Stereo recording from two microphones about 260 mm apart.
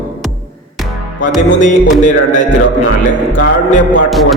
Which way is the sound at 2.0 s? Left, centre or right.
Left.